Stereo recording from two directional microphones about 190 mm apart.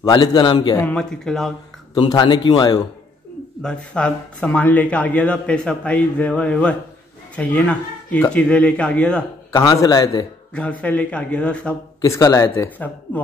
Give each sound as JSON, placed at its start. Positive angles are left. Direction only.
{"t": 0.1, "sound": "a man's voice", "side_deg": 20}
{"t": 0.8, "sound": "speech", "side_deg": 5}
{"t": 2.0, "sound": "a man's voice", "side_deg": 20}
{"t": 3.6, "sound": "speech", "side_deg": 5}
{"t": 9.5, "sound": "a man's voice", "side_deg": 20}
{"t": 10.5, "sound": "speech", "side_deg": 5}
{"t": 12.0, "sound": "speech", "side_deg": 15}